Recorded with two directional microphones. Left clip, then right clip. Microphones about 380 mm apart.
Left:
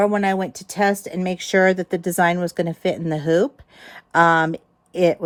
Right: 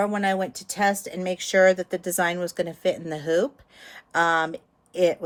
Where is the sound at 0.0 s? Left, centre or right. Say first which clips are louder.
Left 5 dB; left.